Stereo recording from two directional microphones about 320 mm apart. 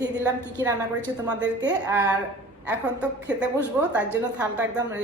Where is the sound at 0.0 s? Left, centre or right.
Centre.